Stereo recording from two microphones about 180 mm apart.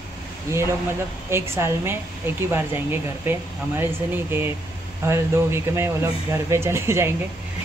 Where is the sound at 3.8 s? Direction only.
10° right (ahead or behind).